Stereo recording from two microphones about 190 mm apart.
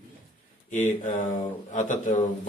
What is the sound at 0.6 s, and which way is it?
A man's voice, 40° left (ahead or behind).